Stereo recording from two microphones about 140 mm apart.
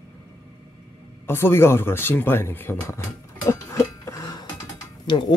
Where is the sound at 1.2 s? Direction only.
15° left (ahead or behind).